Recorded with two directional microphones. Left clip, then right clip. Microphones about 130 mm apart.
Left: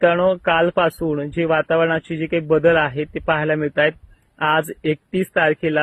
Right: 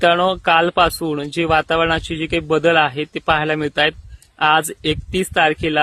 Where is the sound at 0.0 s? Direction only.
30° right (ahead or behind).